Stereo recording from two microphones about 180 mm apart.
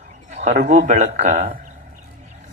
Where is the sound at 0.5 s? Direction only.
55° right (ahead or behind).